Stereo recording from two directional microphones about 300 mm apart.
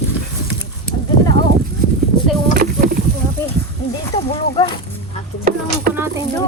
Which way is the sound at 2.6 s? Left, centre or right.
Right.